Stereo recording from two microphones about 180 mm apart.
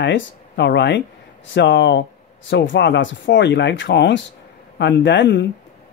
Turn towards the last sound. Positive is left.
turn(degrees=80)